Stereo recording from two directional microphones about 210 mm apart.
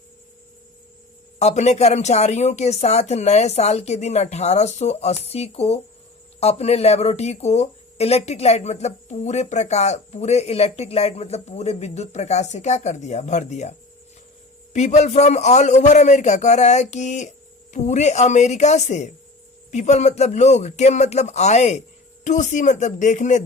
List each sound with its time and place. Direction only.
1.4 s speech: 30° left (ahead or behind)